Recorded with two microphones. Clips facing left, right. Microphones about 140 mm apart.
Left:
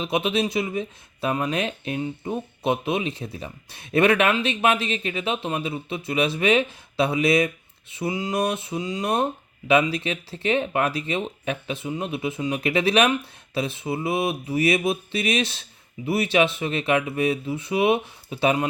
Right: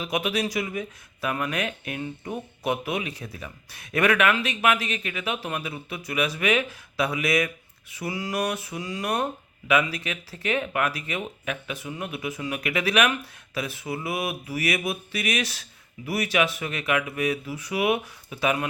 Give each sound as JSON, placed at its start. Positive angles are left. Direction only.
{"t": 0.0, "sound": "speech", "side_deg": 25}